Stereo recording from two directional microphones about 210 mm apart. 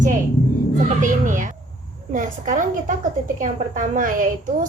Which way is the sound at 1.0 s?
40° right (ahead or behind).